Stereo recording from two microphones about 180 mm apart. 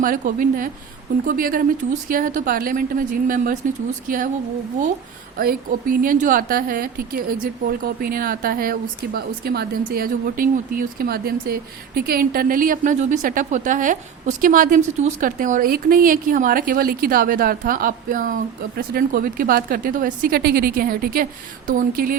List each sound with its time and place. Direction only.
0.0 s speech: 50° right (ahead or behind)
5.4 s speech: 55° right (ahead or behind)